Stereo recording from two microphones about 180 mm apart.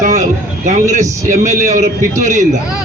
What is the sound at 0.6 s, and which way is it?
A man's voice, 40° right (ahead or behind).